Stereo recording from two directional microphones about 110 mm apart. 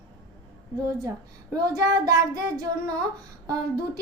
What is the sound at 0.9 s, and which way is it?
Child singing, 35° right (ahead or behind).